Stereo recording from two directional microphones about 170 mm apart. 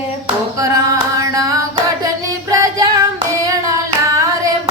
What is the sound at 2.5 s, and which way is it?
Female singing, 20° right (ahead or behind).